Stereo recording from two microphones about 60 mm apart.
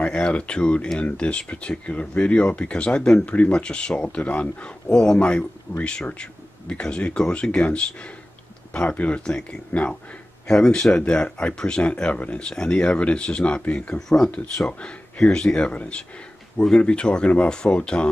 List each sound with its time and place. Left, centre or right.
0.0 s speech: centre
13.9 s speech: centre
14.2 s speech: left